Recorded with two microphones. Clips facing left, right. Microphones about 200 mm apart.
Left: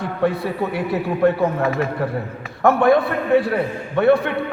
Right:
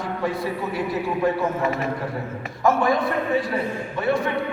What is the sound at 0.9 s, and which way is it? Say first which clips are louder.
Speech: left 5 dB; 60° left (ahead or behind).